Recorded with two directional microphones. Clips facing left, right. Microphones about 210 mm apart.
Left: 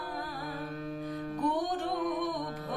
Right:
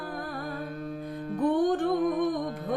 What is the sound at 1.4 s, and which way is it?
Music, 55° right (ahead or behind).